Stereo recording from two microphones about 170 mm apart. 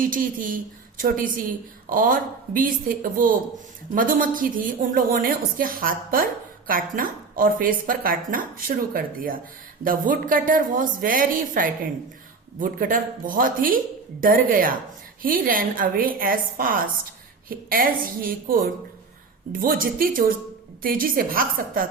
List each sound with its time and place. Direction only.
0.0 s a woman's voice: 55° right (ahead or behind)